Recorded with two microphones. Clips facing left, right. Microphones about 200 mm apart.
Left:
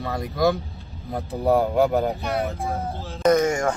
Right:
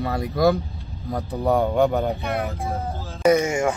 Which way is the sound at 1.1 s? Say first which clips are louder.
Left 1 dB; 30° left (ahead or behind).